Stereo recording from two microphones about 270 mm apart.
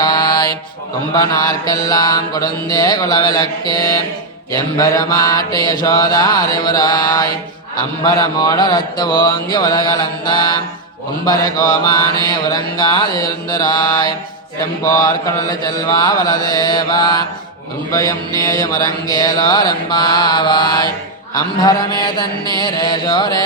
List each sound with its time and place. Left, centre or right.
0.0 s mantra: centre